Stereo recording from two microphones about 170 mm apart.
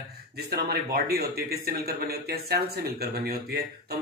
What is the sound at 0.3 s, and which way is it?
Speech, 65° right (ahead or behind).